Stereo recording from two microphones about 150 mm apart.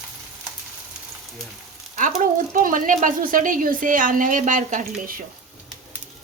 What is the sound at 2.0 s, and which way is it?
A woman's voice, 60° right (ahead or behind).